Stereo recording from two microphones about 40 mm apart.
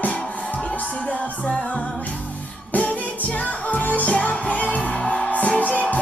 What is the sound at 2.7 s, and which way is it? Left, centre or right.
Music, left.